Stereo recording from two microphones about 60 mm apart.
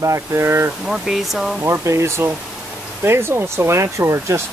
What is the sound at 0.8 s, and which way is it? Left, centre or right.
Speech, centre.